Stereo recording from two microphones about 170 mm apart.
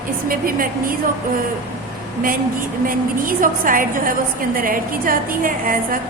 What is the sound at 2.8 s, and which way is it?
A woman's voice, 55° right (ahead or behind).